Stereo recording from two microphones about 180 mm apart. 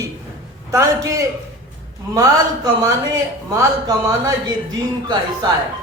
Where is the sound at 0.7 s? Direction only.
20° right (ahead or behind).